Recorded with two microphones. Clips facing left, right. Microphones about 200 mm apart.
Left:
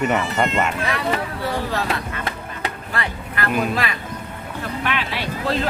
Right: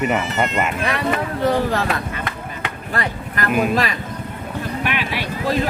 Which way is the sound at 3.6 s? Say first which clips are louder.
Right 5 dB; 40° right (ahead or behind).